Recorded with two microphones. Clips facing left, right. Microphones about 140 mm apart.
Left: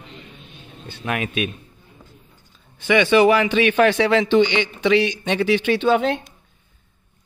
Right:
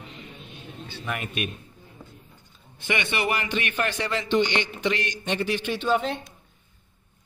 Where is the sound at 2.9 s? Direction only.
90° left.